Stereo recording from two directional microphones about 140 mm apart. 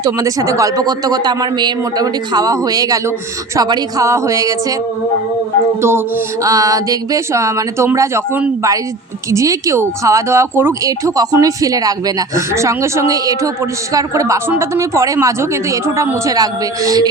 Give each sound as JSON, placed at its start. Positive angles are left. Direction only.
{"t": 0.0, "sound": "speech", "side_deg": -25}
{"t": 5.8, "sound": "speech", "side_deg": -15}